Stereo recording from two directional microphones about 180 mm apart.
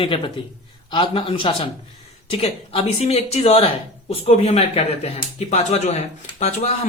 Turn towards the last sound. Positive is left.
turn(degrees=35)  # may be behind; listen again after turning